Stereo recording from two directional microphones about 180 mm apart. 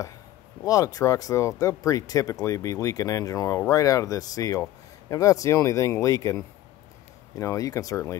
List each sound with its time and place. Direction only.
0.7 s speech: 20° left (ahead or behind)